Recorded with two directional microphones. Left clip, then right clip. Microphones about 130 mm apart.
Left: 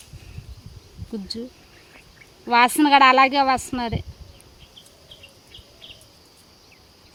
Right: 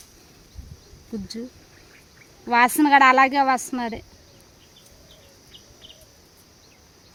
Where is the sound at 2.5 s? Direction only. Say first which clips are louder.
Left 1 dB; 10° right (ahead or behind).